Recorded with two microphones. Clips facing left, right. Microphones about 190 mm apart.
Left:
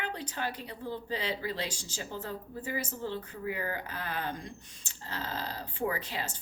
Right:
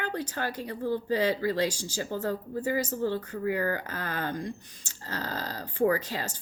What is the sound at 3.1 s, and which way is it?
Speech, 45° right (ahead or behind).